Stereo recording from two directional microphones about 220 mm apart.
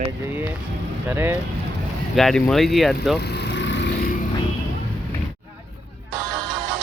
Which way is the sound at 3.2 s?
50° left (ahead or behind).